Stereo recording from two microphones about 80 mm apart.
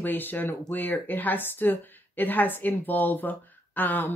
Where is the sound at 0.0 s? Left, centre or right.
Left.